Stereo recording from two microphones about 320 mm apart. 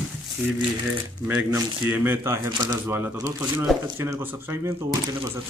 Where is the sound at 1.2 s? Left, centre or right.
Centre.